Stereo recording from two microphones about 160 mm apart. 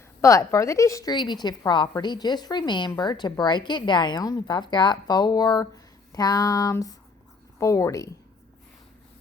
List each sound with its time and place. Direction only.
0.2 s speech: 20° left (ahead or behind)